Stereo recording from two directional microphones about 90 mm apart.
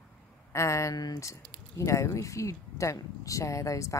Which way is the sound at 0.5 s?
35° left (ahead or behind).